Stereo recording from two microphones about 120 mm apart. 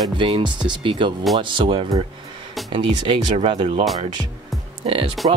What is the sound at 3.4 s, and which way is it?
Speech, 55° right (ahead or behind).